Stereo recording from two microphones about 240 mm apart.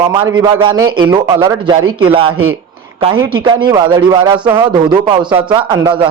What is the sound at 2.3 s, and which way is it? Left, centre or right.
Speech, right.